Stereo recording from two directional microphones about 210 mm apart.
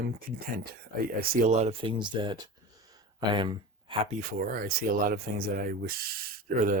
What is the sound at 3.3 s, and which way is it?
Gasp, 20° right (ahead or behind).